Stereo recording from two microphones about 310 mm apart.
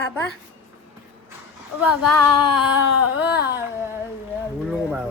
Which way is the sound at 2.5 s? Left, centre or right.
Left.